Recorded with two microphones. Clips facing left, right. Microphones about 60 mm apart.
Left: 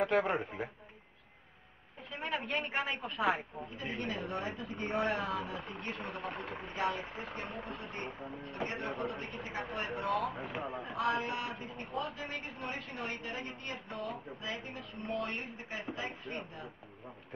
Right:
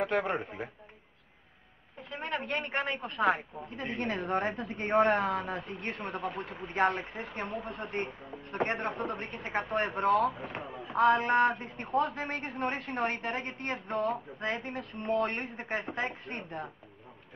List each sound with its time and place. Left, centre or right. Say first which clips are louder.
0.0 s speech: even; centre
2.0 s speech: right 2 dB; centre
3.7 s a woman's voice: right 5 dB; right
10.3 s speech: left 1 dB; centre
11.0 s a woman's voice: right 10 dB; right